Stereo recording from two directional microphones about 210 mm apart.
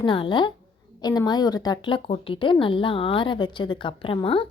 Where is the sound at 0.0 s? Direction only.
25° left (ahead or behind).